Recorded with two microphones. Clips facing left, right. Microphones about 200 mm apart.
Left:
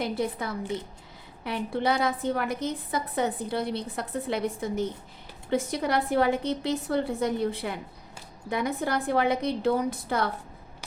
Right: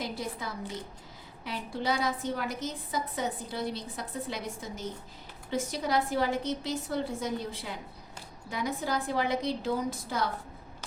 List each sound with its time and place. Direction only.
0.0 s a woman's voice: 60° left (ahead or behind)